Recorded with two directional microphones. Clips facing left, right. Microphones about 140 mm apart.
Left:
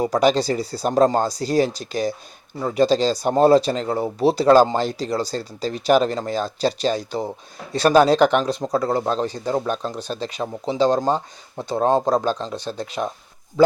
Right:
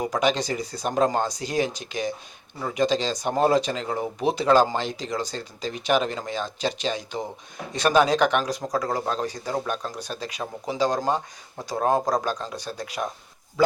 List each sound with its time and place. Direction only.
0.0 s speech: 35° left (ahead or behind)